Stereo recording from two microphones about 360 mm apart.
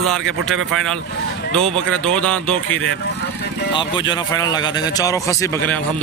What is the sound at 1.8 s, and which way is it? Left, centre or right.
Speech, centre.